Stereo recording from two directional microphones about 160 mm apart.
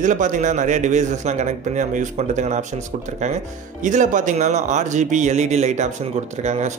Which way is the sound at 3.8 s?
50° right (ahead or behind).